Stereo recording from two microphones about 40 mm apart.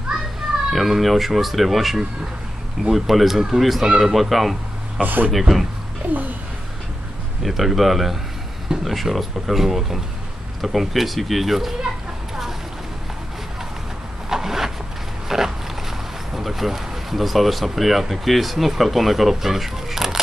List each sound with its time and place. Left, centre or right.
0.7 s speech: centre
5.0 s speech: right
5.3 s speech: centre
6.0 s speech: right
7.4 s speech: centre
14.3 s vehicle: centre
15.2 s dog: centre
16.3 s speech: centre